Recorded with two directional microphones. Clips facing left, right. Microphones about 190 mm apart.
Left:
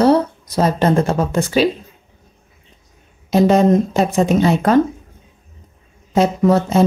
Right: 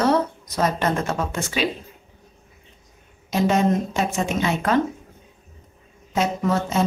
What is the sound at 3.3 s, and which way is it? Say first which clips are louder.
Speech: left 7 dB; 35° left (ahead or behind).